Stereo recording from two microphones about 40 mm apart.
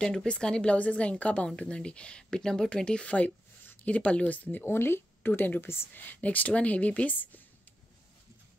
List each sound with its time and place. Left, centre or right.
0.0 s a woman's voice: centre
0.7 s speech: left
4.4 s speech: left
4.6 s a woman's voice: left
5.9 s speech: left